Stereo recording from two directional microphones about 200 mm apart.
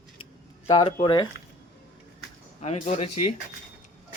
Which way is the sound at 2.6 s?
35° left (ahead or behind).